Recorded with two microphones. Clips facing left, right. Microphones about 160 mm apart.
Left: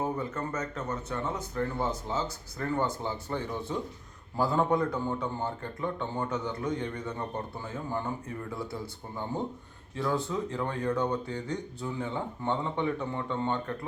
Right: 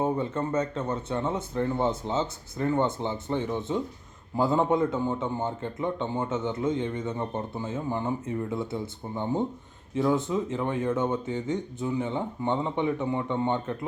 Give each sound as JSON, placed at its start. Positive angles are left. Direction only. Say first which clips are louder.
{"t": 0.0, "sound": "a man's voice", "louder": "right 5 dB", "side_deg": -25}